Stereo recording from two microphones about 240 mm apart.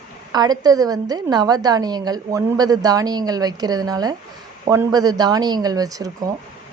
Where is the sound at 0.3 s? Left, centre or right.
Centre.